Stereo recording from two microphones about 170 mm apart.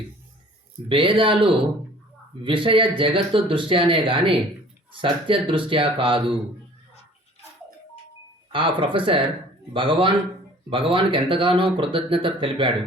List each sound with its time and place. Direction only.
0.9 s speech: 30° right (ahead or behind)
8.5 s speech: 30° right (ahead or behind)